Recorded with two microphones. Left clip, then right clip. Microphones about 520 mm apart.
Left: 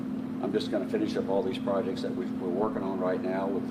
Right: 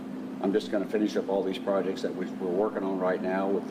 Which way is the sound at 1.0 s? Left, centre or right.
Left.